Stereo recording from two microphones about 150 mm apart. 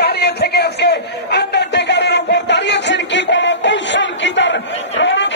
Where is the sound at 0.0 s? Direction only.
90° left.